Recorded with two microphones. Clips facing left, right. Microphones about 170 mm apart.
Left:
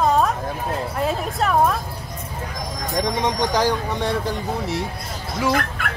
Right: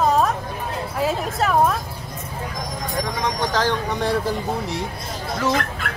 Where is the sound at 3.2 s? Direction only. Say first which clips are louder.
Left 1 dB; 15° left (ahead or behind).